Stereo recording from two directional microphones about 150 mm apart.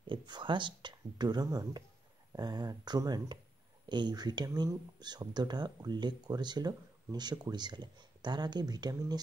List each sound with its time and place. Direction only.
0.0 s speech: 30° right (ahead or behind)